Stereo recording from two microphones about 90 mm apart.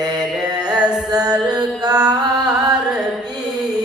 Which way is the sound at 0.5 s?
50° right (ahead or behind).